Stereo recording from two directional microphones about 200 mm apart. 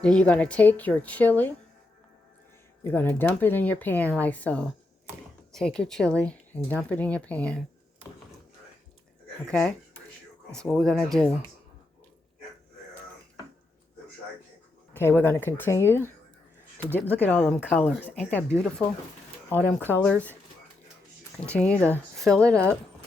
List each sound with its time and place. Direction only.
0.0 s a woman's voice: 5° left (ahead or behind)
2.8 s a woman's voice: 10° left (ahead or behind)
9.5 s speech: 5° left (ahead or behind)
14.9 s a woman's voice: 10° left (ahead or behind)
21.3 s speech: 5° left (ahead or behind)